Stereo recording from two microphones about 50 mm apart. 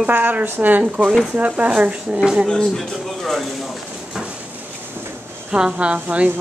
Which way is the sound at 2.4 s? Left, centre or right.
Centre.